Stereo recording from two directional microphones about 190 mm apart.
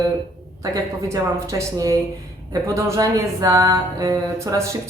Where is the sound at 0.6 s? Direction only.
20° right (ahead or behind).